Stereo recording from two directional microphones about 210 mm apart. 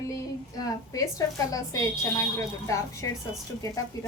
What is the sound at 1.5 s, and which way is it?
A woman's voice, 15° left (ahead or behind).